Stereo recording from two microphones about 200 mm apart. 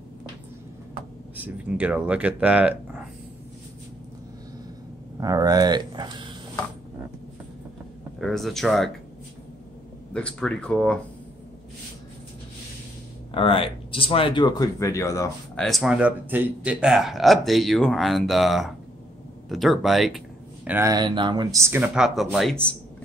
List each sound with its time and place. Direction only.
1.3 s speech: 10° right (ahead or behind)
5.2 s speech: 20° right (ahead or behind)
8.2 s speech: centre (ahead or behind)
10.1 s speech: 5° left (ahead or behind)
13.3 s speech: 25° left (ahead or behind)
15.5 s speech: centre (ahead or behind)
20.6 s speech: 10° right (ahead or behind)